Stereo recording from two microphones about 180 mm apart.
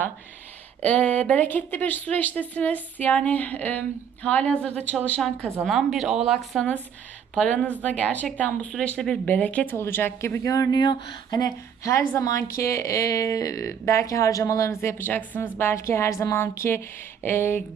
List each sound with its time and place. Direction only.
0.8 s speech: 5° left (ahead or behind)